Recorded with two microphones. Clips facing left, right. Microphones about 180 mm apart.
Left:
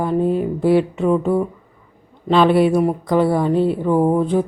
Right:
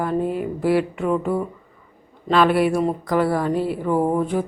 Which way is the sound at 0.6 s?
25° left (ahead or behind).